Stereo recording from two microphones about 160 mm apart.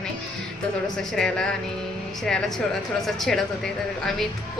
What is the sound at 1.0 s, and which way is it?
Speech, centre (ahead or behind).